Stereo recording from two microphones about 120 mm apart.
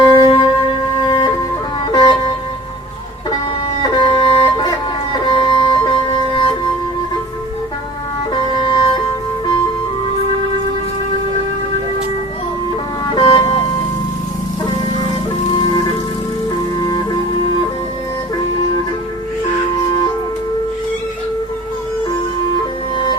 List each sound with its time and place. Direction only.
0.0 s music: 40° left (ahead or behind)
3.8 s music: 35° left (ahead or behind)
4.1 s music: 50° left (ahead or behind)
8.3 s music: 40° left (ahead or behind)
13.1 s vehicle: 35° left (ahead or behind)
16.8 s music: 35° left (ahead or behind)